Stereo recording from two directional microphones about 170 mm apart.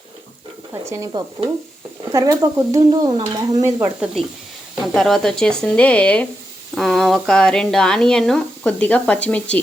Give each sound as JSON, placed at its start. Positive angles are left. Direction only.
{"t": 0.7, "sound": "speech", "side_deg": -20}
{"t": 4.8, "sound": "speech", "side_deg": 0}